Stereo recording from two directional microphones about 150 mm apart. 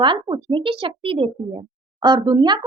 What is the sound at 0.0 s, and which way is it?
A child's voice, 30° right (ahead or behind).